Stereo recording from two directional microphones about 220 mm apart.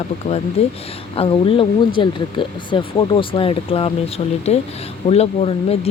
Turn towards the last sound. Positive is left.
turn(degrees=25)  # may be behind; listen again after turning